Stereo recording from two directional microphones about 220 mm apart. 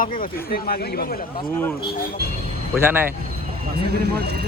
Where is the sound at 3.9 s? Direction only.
45° right (ahead or behind).